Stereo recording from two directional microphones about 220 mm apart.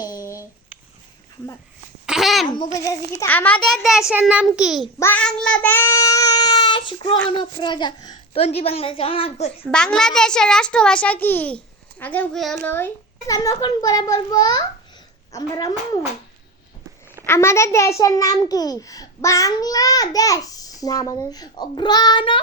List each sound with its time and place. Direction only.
2.0 s a sound: centre (ahead or behind)
2.5 s a child's voice: 20° left (ahead or behind)
3.2 s a child's voice: 10° left (ahead or behind)
4.9 s child singing: 10° left (ahead or behind)
7.3 s a child's voice: 20° left (ahead or behind)
9.7 s a child's voice: 5° left (ahead or behind)
17.2 s a child's voice: 10° left (ahead or behind)